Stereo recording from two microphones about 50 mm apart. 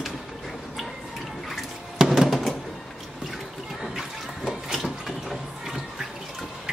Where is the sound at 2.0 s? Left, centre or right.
Centre.